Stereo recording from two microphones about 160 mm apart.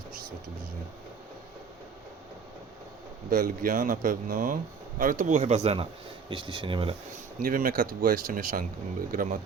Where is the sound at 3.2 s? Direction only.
60° right (ahead or behind); by 6.9 s 30° right (ahead or behind).